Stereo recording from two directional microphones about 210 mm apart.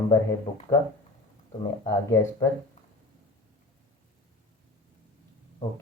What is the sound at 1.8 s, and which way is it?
Speech, 10° left (ahead or behind).